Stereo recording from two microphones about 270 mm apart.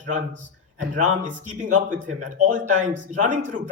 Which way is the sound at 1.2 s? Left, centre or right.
Right.